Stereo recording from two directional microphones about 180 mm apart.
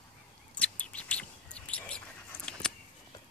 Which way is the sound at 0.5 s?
5° left (ahead or behind).